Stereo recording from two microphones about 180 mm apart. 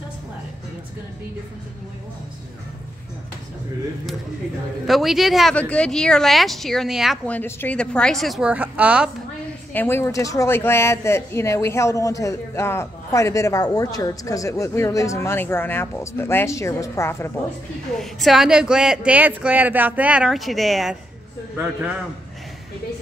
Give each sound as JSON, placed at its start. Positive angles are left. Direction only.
{"t": 4.8, "sound": "a woman's voice", "side_deg": 0}
{"t": 7.2, "sound": "a woman's voice", "side_deg": 10}
{"t": 9.8, "sound": "speech", "side_deg": 15}
{"t": 17.9, "sound": "a woman's voice", "side_deg": 0}